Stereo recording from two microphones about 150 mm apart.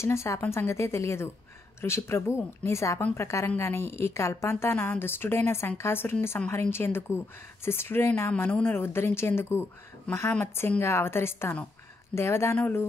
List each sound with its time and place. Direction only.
0.0 s a woman's voice: 20° left (ahead or behind)